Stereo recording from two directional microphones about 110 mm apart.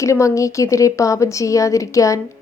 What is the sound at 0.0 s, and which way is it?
A woman's voice, 30° left (ahead or behind).